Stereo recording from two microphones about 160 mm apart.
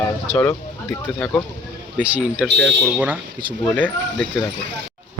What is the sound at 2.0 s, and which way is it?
Speech, 10° right (ahead or behind).